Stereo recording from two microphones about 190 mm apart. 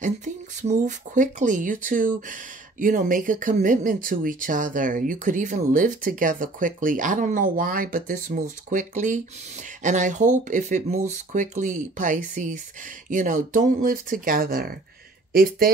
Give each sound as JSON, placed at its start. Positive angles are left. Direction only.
{"t": 0.0, "sound": "speech", "side_deg": -40}